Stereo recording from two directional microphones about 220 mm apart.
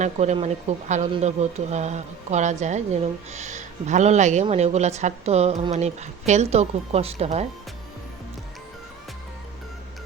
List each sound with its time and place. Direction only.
0.0 s speech: 30° right (ahead or behind)